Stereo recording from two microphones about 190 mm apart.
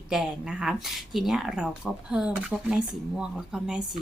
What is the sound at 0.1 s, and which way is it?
A woman's voice, 5° right (ahead or behind).